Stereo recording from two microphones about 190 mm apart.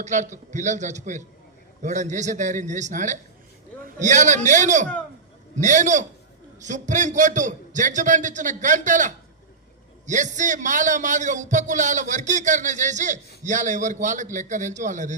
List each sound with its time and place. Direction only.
0.0 s a man's voice: 40° right (ahead or behind)